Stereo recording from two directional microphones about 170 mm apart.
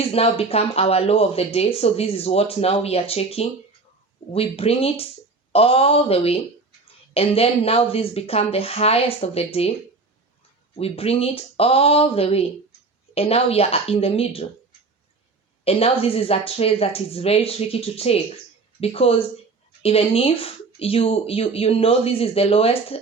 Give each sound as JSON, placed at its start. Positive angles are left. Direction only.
{"t": 0.1, "sound": "speech", "side_deg": 35}
{"t": 10.8, "sound": "speech", "side_deg": 35}
{"t": 15.6, "sound": "speech", "side_deg": 35}